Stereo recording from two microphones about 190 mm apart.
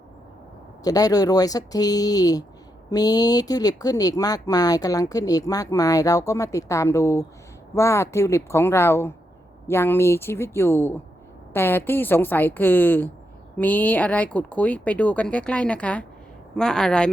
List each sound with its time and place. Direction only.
0.9 s speech: 20° left (ahead or behind); by 17.1 s 5° left (ahead or behind)